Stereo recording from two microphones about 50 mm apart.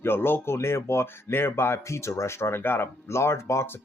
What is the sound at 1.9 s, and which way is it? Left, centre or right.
Speech, left.